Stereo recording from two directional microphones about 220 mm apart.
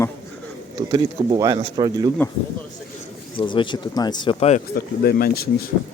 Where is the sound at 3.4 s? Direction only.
20° left (ahead or behind).